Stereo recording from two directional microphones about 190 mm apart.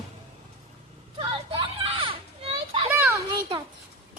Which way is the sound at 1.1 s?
30° right (ahead or behind).